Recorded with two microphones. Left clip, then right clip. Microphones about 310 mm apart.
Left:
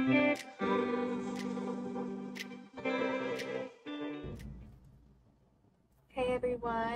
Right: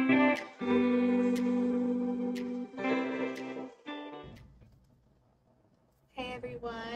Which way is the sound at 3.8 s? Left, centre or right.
Centre.